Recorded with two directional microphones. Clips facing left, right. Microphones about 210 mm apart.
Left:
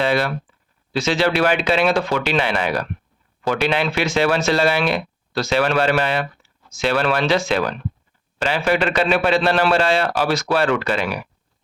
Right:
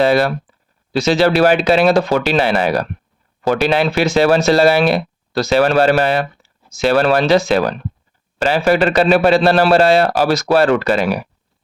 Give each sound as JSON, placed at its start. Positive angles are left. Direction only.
{"t": 0.0, "sound": "speech", "side_deg": -40}